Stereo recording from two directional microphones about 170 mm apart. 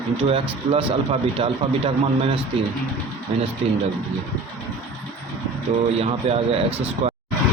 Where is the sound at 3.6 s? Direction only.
35° right (ahead or behind).